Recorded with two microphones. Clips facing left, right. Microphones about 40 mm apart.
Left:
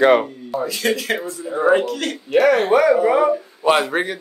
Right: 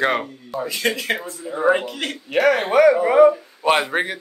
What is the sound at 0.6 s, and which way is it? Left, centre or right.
Speech, right.